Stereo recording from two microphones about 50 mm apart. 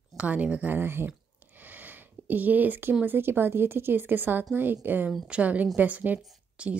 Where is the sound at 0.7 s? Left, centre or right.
Right.